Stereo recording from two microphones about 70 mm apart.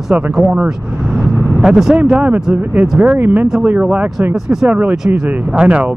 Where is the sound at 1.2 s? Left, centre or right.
Centre.